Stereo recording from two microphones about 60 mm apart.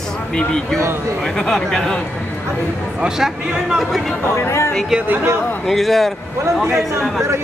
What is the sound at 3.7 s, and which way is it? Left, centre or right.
Speech, centre.